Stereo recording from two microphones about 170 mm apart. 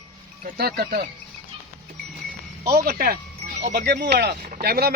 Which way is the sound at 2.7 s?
65° right (ahead or behind).